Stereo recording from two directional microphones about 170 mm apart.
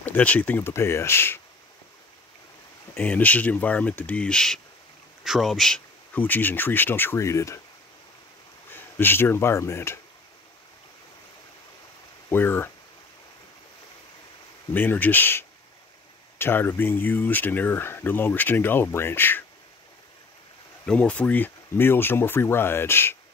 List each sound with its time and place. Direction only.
0.0 s speech: 10° left (ahead or behind)
2.9 s speech: 10° left (ahead or behind)
8.6 s speech: 10° left (ahead or behind)
12.3 s speech: 15° left (ahead or behind)
14.7 s speech: 10° left (ahead or behind)
20.8 s speech: 5° left (ahead or behind)